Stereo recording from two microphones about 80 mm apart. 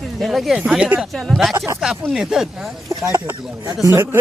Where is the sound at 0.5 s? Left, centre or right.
Centre.